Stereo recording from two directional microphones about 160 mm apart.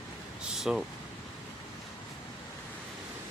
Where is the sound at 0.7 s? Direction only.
5° right (ahead or behind).